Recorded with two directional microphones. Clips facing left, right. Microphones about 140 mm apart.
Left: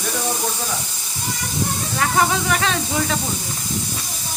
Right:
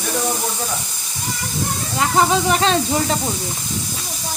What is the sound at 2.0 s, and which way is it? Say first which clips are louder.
Speech: right 3 dB; 25° right (ahead or behind).